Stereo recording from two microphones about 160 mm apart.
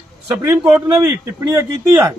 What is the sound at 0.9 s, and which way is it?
A man's voice, 20° right (ahead or behind).